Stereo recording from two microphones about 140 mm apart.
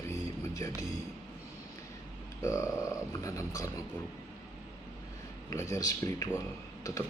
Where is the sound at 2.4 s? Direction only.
20° left (ahead or behind).